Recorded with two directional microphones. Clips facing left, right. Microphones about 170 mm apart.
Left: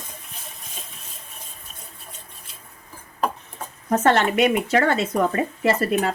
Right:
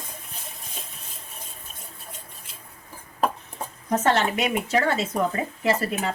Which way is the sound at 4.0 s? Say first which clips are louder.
Left 5 dB; 60° left (ahead or behind).